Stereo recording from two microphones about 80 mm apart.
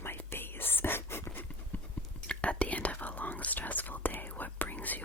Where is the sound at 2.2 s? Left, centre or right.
Centre.